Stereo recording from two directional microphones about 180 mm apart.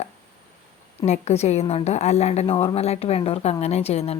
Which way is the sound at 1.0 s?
40° left (ahead or behind).